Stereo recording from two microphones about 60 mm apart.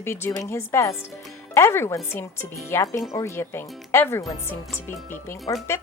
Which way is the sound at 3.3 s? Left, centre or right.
Left.